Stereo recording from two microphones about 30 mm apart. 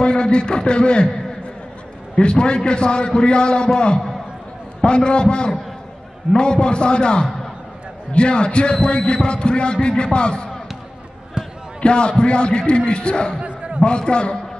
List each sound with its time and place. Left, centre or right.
0.0 s a man's voice: left
2.1 s a man's voice: left
11.4 s basketball bounce: right
11.8 s a man's voice: left
13.4 s a sound: right
13.8 s a man's voice: left